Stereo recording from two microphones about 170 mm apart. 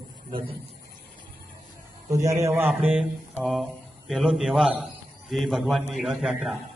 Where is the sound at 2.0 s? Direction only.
20° right (ahead or behind).